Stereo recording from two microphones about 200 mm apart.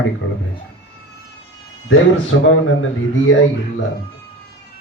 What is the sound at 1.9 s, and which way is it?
Speech, 80° left.